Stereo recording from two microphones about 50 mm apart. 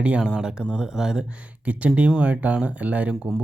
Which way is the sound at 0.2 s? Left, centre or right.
Centre.